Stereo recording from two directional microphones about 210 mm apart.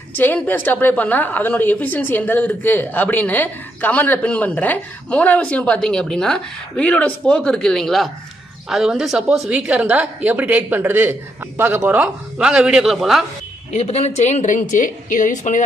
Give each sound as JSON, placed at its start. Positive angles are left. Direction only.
{"t": 0.1, "sound": "a woman's voice", "side_deg": 10}
{"t": 13.7, "sound": "speech", "side_deg": 30}